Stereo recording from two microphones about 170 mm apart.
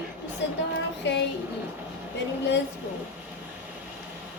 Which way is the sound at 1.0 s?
90° left.